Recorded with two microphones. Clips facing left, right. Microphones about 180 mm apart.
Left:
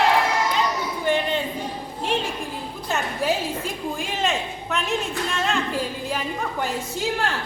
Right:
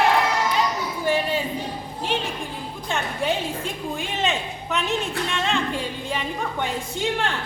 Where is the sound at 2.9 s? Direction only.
5° left (ahead or behind).